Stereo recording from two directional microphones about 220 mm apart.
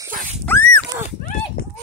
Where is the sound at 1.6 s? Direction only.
45° left (ahead or behind).